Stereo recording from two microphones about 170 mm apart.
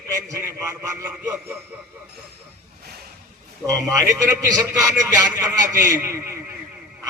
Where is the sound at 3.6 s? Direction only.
20° right (ahead or behind).